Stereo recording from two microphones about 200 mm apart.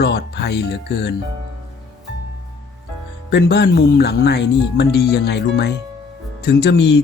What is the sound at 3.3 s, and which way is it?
Speech, 60° left (ahead or behind).